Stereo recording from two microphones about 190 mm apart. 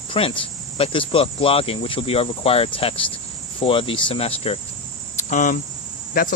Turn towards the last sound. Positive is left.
turn(degrees=50)  # may be behind; listen again after turning